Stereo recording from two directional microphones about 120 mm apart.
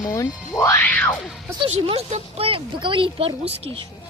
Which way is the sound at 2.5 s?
45° right (ahead or behind).